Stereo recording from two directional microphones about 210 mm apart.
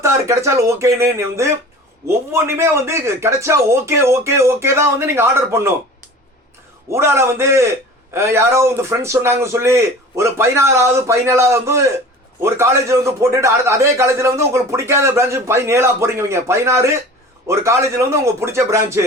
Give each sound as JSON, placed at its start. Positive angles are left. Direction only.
{"t": 0.0, "sound": "a man's voice", "side_deg": -15}
{"t": 6.9, "sound": "a man's voice", "side_deg": -10}